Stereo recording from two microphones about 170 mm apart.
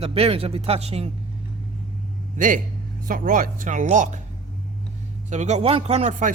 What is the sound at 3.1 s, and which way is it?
Speech, 55° right (ahead or behind).